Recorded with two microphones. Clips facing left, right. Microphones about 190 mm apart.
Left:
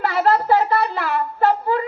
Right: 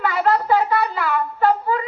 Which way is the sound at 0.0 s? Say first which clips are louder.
Left 1 dB; 35° left (ahead or behind).